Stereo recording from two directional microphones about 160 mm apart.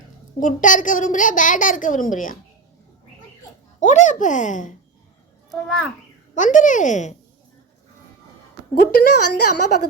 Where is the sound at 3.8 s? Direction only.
50° left (ahead or behind).